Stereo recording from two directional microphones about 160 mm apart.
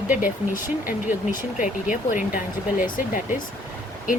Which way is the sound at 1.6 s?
55° left (ahead or behind).